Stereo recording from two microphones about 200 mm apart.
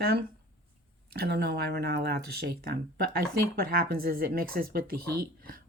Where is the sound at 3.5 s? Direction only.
50° right (ahead or behind).